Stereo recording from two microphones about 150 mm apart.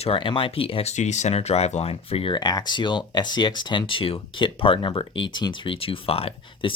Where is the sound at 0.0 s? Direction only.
35° left (ahead or behind).